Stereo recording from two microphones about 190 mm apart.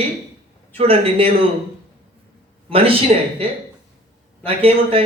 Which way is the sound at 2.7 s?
30° right (ahead or behind).